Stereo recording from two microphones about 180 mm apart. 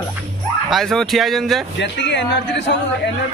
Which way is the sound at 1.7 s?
75° left (ahead or behind).